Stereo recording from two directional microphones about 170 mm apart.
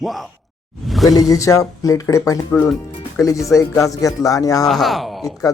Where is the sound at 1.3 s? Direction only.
20° left (ahead or behind).